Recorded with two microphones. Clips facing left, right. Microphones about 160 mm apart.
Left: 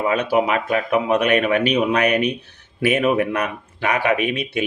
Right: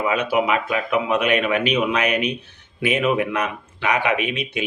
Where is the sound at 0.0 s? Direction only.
40° left (ahead or behind).